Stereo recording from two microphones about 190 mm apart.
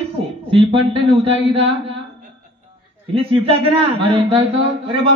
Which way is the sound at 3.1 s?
30° right (ahead or behind).